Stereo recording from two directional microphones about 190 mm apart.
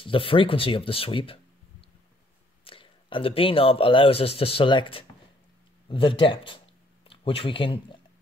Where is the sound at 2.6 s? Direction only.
30° left (ahead or behind).